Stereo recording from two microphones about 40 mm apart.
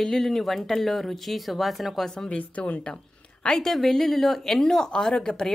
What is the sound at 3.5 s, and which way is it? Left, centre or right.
Speech, centre.